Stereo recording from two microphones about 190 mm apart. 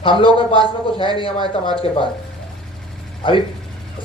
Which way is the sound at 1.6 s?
25° left (ahead or behind).